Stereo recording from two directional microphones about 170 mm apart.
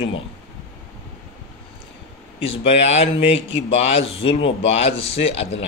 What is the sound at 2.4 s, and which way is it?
Speech, 35° left (ahead or behind).